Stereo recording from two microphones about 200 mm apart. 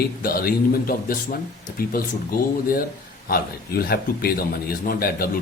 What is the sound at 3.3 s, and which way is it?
A man's voice, 45° left (ahead or behind).